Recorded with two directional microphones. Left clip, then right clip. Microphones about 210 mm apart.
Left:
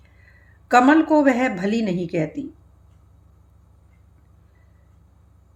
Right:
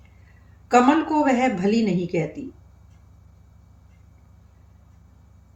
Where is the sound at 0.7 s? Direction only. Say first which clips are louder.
Left 3 dB; 55° left (ahead or behind).